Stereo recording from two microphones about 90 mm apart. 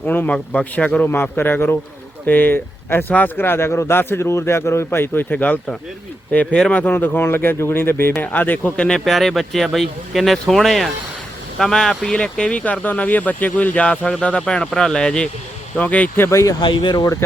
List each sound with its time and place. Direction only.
0.0 s speech: 20° left (ahead or behind)
9.0 s speech: centre (ahead or behind)
16.2 s speech: 35° left (ahead or behind)
16.6 s speech: 60° left (ahead or behind)